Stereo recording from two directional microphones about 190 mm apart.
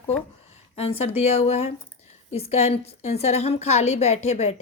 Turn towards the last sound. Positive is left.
turn(degrees=35)  # may be behind; listen again after turning